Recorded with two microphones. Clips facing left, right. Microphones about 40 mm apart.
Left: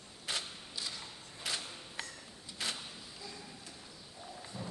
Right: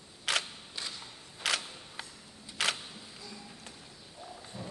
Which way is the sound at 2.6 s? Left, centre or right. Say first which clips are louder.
Right 8 dB; right.